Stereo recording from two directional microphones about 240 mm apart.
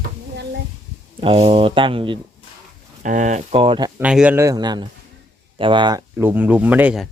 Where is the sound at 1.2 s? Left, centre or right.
Right.